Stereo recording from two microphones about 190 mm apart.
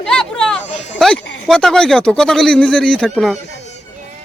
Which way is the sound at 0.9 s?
Centre (ahead or behind).